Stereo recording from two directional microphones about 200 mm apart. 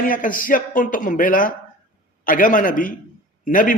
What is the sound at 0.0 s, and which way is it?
A man's voice, 45° left (ahead or behind).